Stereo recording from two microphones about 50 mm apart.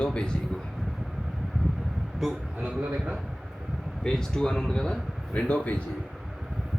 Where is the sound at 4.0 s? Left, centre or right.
Centre.